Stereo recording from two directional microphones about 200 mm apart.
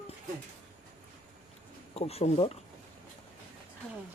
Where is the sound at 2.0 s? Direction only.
30° left (ahead or behind).